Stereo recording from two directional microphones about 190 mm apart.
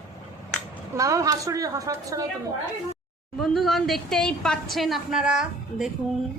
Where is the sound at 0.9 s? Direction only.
15° right (ahead or behind).